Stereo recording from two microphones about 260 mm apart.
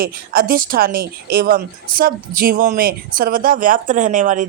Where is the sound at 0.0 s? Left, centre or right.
Right.